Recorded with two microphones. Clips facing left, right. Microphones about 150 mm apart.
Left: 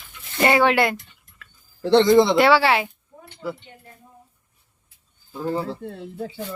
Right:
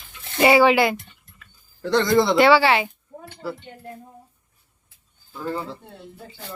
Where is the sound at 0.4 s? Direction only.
5° right (ahead or behind).